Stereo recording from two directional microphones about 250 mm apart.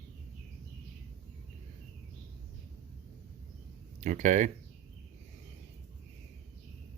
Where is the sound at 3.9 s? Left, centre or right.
Right.